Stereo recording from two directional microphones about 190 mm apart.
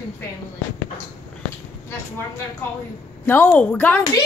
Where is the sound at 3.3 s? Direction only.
10° left (ahead or behind).